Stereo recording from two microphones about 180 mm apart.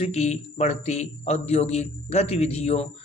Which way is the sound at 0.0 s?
35° left (ahead or behind).